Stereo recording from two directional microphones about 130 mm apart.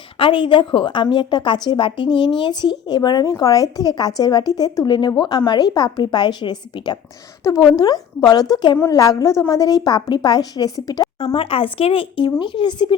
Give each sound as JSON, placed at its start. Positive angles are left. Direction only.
{"t": 0.2, "sound": "speech", "side_deg": 40}
{"t": 7.4, "sound": "a woman's voice", "side_deg": 25}
{"t": 11.3, "sound": "speech", "side_deg": 45}